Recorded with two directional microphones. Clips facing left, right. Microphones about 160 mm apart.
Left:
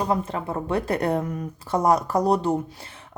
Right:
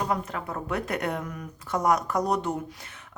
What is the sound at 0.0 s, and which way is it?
Speech, 30° left (ahead or behind).